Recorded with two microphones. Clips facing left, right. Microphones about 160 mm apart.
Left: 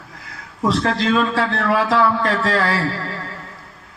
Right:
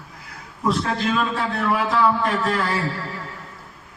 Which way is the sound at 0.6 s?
90° left.